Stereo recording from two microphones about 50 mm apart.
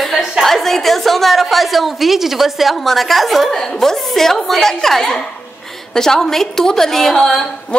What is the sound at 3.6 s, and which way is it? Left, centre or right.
A woman's voice, centre.